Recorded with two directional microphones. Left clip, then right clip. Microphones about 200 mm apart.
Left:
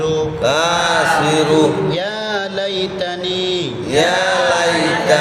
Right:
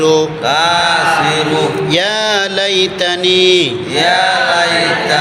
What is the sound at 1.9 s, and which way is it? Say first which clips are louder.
Mantra: right 7 dB; 35° right (ahead or behind).